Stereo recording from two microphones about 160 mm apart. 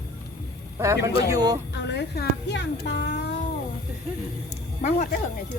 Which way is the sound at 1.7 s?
90° left.